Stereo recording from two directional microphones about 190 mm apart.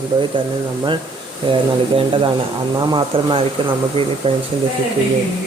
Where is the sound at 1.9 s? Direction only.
30° right (ahead or behind).